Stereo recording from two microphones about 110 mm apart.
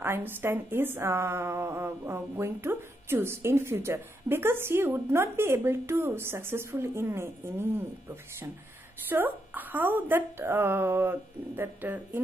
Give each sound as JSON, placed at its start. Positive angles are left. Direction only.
{"t": 0.0, "sound": "a woman's voice", "side_deg": -20}